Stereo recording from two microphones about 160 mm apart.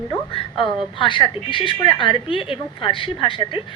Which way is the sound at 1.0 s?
30° left (ahead or behind).